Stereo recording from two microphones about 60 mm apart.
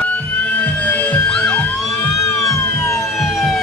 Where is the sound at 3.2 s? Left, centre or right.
Centre.